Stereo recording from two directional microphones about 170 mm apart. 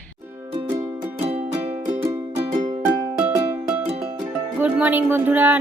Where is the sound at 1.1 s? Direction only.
35° right (ahead or behind).